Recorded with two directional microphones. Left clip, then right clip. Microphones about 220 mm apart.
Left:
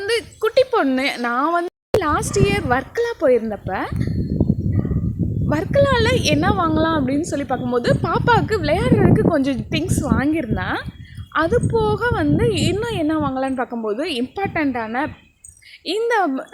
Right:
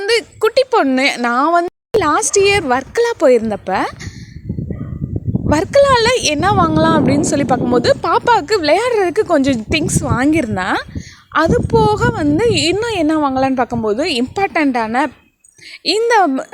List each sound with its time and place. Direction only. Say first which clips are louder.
0.0 s speech: right 6 dB; 40° right (ahead or behind)
5.5 s a woman's voice: right 6 dB; 40° right (ahead or behind)